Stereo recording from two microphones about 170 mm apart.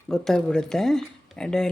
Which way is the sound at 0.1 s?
5° left (ahead or behind).